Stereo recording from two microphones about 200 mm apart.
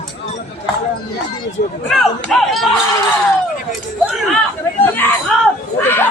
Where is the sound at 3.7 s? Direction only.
Centre (ahead or behind).